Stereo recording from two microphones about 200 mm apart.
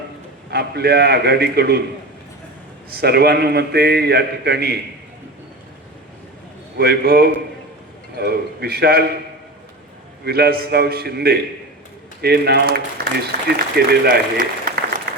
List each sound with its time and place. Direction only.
0.5 s speech: 55° right (ahead or behind)
2.9 s speech: 50° right (ahead or behind)
6.7 s speech: 50° right (ahead or behind)
10.2 s speech: 50° right (ahead or behind)